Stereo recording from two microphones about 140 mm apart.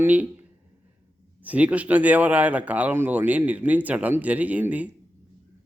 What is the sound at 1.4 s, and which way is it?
Speech, 10° right (ahead or behind).